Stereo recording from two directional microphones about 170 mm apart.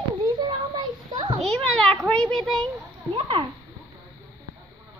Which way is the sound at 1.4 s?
5° left (ahead or behind).